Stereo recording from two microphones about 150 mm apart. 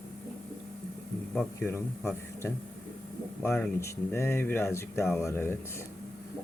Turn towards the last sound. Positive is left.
turn(degrees=15)  # may be behind; listen again after turning